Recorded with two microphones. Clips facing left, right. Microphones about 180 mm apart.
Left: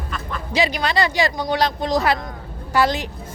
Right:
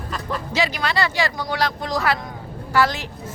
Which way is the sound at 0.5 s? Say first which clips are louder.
Left 3 dB; 20° left (ahead or behind).